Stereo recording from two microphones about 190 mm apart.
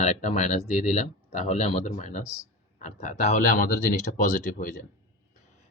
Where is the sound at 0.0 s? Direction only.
40° left (ahead or behind).